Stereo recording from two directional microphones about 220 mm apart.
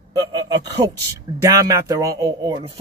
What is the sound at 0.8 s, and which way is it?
Speech, 20° right (ahead or behind).